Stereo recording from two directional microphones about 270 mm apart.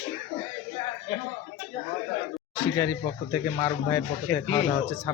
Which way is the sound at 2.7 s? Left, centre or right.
Centre.